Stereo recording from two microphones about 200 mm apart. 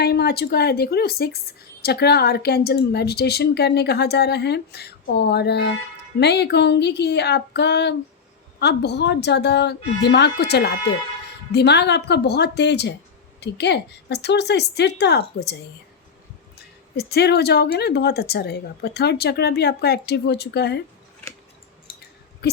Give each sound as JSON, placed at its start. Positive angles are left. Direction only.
{"t": 0.0, "sound": "a woman's voice", "side_deg": 55}
{"t": 17.0, "sound": "speech", "side_deg": 55}
{"t": 21.9, "sound": "a sound", "side_deg": 25}